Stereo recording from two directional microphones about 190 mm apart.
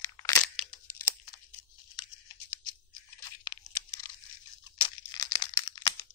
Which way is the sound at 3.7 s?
20° left (ahead or behind).